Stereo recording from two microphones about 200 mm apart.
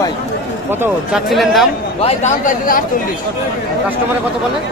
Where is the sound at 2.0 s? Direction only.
40° left (ahead or behind).